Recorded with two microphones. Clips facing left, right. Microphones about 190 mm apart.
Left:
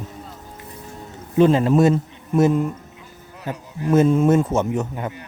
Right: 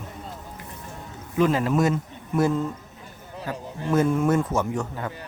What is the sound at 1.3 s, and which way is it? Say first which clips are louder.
A man's voice: left 6 dB; 30° left (ahead or behind).